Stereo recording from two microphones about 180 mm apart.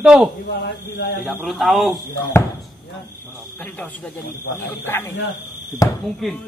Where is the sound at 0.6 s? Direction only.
70° left (ahead or behind).